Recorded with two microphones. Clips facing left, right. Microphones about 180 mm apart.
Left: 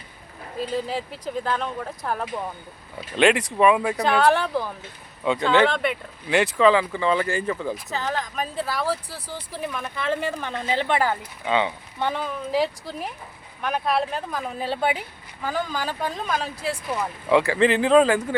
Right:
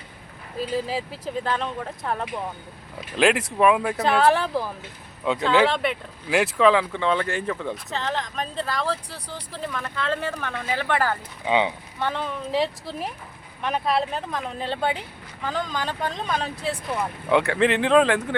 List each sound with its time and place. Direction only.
0.6 s speech: centre (ahead or behind); by 11.2 s 15° left (ahead or behind)
11.4 s speech: 15° right (ahead or behind)
11.9 s speech: 15° left (ahead or behind)
12.2 s speech: centre (ahead or behind)